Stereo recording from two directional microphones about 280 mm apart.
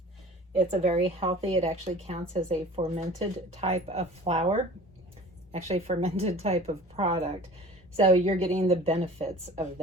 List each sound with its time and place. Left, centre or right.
0.5 s speech: right